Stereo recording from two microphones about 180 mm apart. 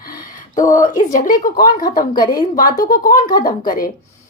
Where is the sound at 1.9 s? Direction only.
25° left (ahead or behind).